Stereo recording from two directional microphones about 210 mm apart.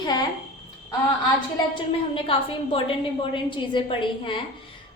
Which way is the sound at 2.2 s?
25° left (ahead or behind).